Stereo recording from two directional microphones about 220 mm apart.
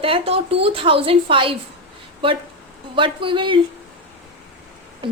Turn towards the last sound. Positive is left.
turn(degrees=-20)  # may be behind; listen again after turning